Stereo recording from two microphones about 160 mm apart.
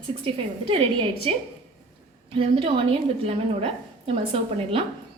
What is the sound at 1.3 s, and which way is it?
A woman's voice, 35° right (ahead or behind).